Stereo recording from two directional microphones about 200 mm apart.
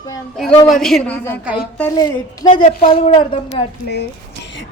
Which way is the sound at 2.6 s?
35° left (ahead or behind).